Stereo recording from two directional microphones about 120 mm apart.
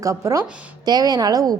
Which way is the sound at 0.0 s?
25° right (ahead or behind).